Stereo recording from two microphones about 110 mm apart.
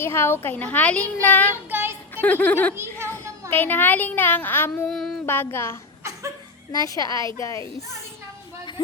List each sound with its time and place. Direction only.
0.0 s a child's voice: 20° left (ahead or behind)
1.7 s a sound: 20° right (ahead or behind)
2.2 s a child's voice: 15° left (ahead or behind)
2.7 s children playing: 25° right (ahead or behind)
3.5 s speech: 20° left (ahead or behind)
4.9 s child singing: 5° left (ahead or behind)
5.2 s speech: 20° left (ahead or behind)
6.7 s a woman's voice: 35° left (ahead or behind)